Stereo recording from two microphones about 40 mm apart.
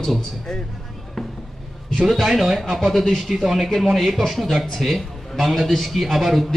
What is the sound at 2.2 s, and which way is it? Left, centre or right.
Speech, centre.